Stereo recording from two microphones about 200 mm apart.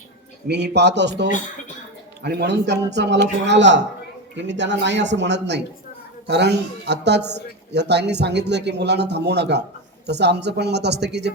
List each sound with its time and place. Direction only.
0.4 s a man's voice: 60° right (ahead or behind)